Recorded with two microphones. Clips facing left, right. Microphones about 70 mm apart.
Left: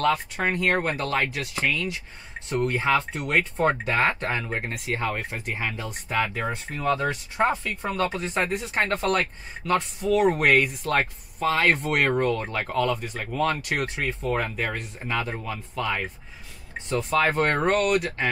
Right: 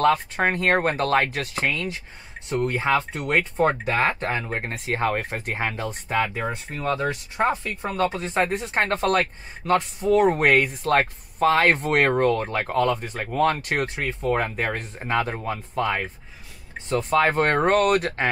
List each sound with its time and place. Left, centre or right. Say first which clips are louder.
0.0 s speech: right 4 dB; right
2.5 s speech: right 1 dB; right
3.3 s speech: right 1 dB; centre
3.9 s speech: right 1 dB; right
4.6 s speech: right 3 dB; right
7.8 s speech: right 3 dB; right